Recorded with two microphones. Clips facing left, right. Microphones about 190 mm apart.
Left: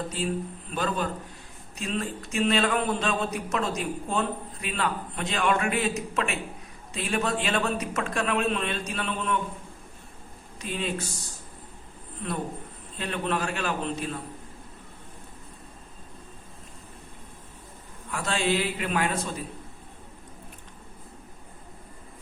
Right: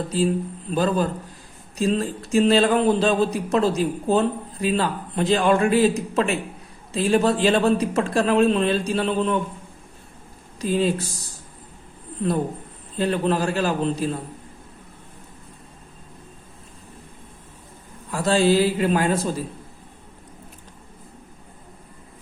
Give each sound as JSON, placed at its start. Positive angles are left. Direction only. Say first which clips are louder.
{"t": 0.1, "sound": "speech", "louder": "right 8 dB", "side_deg": -35}
{"t": 10.6, "sound": "speech", "louder": "right 11 dB", "side_deg": -35}
{"t": 13.0, "sound": "speech", "louder": "right 8 dB", "side_deg": -35}
{"t": 18.1, "sound": "speech", "louder": "right 9 dB", "side_deg": -35}